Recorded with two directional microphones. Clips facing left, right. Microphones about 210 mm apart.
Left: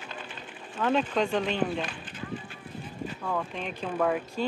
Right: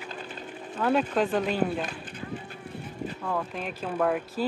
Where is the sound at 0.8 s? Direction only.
5° right (ahead or behind).